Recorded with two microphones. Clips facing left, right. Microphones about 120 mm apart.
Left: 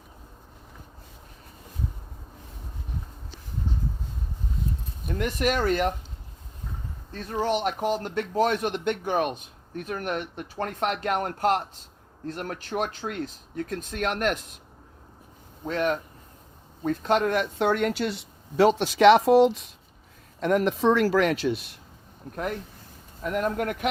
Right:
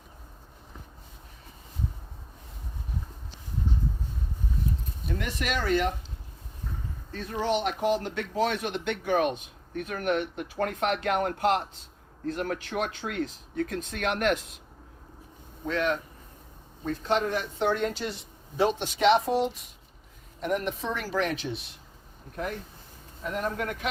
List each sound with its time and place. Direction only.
5.0 s speech: 45° left (ahead or behind)
7.1 s speech: 40° left (ahead or behind)
15.6 s speech: 40° left (ahead or behind)
16.8 s speech: 55° left (ahead or behind); by 21.6 s 90° left
23.3 s speech: 55° left (ahead or behind)